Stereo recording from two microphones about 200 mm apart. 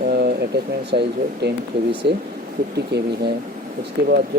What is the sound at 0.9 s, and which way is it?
Speech, 55° right (ahead or behind).